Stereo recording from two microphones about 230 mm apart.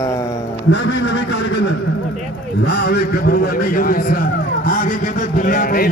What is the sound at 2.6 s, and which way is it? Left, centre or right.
A man's voice, left.